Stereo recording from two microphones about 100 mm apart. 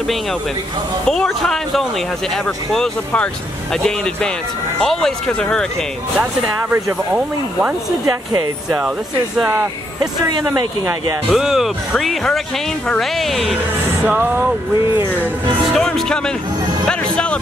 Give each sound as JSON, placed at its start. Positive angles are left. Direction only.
{"t": 1.0, "sound": "speech", "side_deg": 5}
{"t": 6.7, "sound": "speech", "side_deg": -20}
{"t": 11.3, "sound": "speech", "side_deg": -5}
{"t": 14.0, "sound": "music", "side_deg": -20}
{"t": 15.7, "sound": "speech", "side_deg": 5}